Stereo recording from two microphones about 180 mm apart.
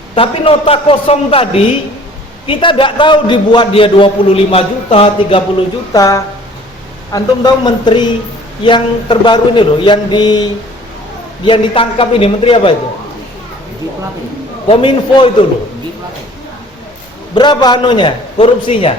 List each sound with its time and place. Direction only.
0.2 s a man's voice: 30° left (ahead or behind)
5.9 s a man's voice: 20° left (ahead or behind)
14.7 s a man's voice: 30° left (ahead or behind)
17.3 s a man's voice: 25° left (ahead or behind)